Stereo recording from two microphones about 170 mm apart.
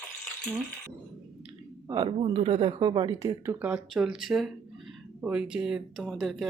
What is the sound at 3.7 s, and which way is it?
Speech, 5° right (ahead or behind).